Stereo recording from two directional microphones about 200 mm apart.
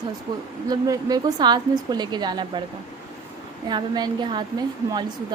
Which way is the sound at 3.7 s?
20° right (ahead or behind).